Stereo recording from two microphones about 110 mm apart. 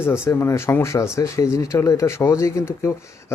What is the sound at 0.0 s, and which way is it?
Speech, 25° left (ahead or behind).